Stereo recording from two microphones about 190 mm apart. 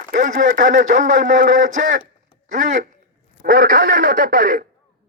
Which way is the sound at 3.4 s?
50° right (ahead or behind).